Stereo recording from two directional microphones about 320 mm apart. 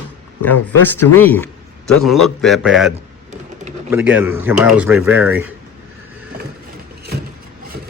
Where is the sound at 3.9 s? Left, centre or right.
Centre.